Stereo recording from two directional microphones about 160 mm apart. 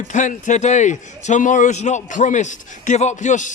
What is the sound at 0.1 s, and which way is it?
A man's voice, 50° left (ahead or behind).